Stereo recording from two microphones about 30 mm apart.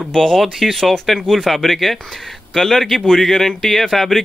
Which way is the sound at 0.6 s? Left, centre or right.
Centre.